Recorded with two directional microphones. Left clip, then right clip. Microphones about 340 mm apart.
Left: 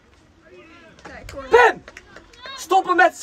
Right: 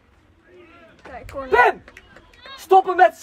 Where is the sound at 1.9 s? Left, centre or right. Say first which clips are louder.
Left 3 dB; centre.